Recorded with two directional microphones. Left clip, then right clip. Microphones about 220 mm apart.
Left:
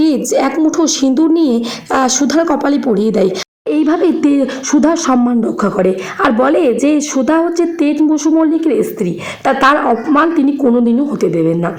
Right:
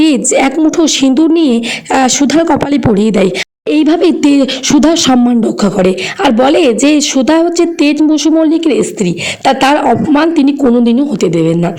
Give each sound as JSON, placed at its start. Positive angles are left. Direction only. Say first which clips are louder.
{"t": 0.0, "sound": "a woman's voice", "louder": "right 3 dB", "side_deg": -35}